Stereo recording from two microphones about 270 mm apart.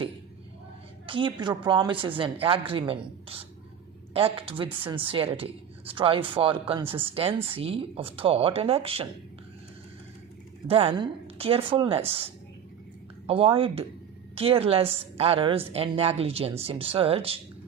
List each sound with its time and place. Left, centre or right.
1.0 s speech: centre
10.7 s speech: right